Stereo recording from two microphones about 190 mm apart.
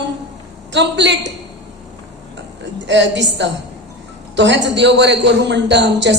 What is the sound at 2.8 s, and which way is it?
A man's voice, 70° right (ahead or behind).